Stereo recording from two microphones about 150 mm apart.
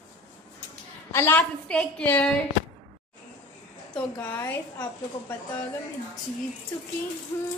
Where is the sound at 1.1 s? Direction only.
15° left (ahead or behind).